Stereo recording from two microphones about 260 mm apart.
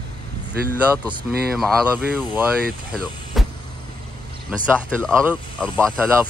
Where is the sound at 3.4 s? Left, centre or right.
Centre.